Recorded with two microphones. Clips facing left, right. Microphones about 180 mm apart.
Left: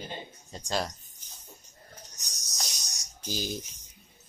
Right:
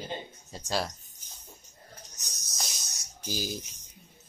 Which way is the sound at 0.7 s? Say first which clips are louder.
Even; 5° right (ahead or behind).